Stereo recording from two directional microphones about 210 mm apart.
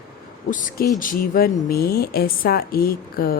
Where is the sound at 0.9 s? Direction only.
40° left (ahead or behind).